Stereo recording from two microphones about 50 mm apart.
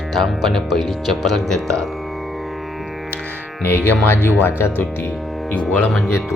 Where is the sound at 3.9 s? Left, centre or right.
Left.